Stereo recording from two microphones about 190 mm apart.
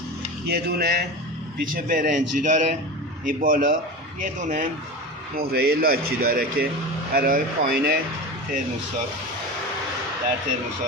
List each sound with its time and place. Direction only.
0.4 s speech: 55° right (ahead or behind)
1.7 s speech: 45° right (ahead or behind)
5.4 s speech: 55° right (ahead or behind)